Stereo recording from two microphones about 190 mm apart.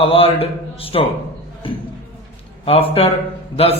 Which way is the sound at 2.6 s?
30° left (ahead or behind).